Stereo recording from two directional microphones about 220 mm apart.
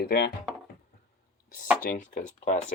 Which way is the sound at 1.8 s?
35° left (ahead or behind).